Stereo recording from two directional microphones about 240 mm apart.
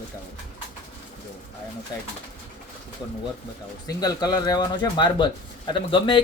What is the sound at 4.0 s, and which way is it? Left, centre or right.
Speech, centre.